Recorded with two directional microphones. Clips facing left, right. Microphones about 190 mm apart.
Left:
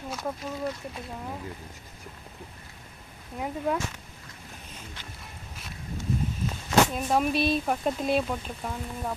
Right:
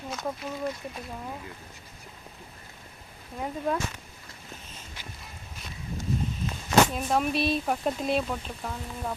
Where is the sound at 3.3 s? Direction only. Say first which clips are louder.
Left 1 dB; 10° left (ahead or behind).